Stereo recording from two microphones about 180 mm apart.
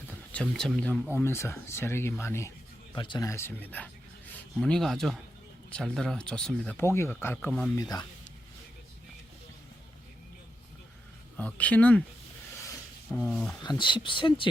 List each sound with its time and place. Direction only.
0.5 s speech: 5° left (ahead or behind)
2.9 s a man's voice: 25° left (ahead or behind); by 6.7 s 5° left (ahead or behind)
6.7 s speech: 15° left (ahead or behind)
11.3 s speech: 10° left (ahead or behind)
13.1 s speech: 5° left (ahead or behind)
13.6 s speech: 25° left (ahead or behind)